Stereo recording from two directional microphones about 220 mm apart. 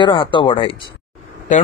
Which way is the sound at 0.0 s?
20° left (ahead or behind).